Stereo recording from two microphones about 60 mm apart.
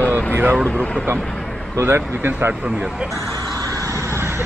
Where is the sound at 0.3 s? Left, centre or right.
Right.